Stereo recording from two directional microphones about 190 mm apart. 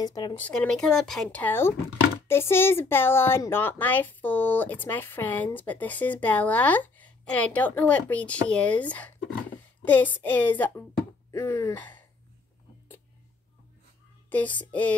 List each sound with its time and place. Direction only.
0.0 s speech: 20° left (ahead or behind)
0.4 s speech: 5° left (ahead or behind)
9.8 s a sound: 10° left (ahead or behind)
10.2 s speech: 10° left (ahead or behind)
14.3 s speech: 10° left (ahead or behind)